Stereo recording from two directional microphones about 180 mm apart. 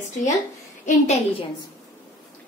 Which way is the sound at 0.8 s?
35° left (ahead or behind).